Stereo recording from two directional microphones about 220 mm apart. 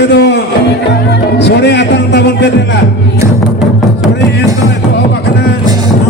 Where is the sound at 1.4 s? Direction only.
50° left (ahead or behind).